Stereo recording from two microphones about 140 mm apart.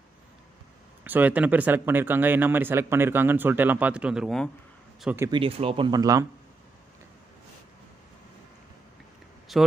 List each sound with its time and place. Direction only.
1.0 s speech: 10° right (ahead or behind)
5.3 s speech: 40° right (ahead or behind)
5.9 s speech: 25° right (ahead or behind)
9.5 s a man's voice: centre (ahead or behind)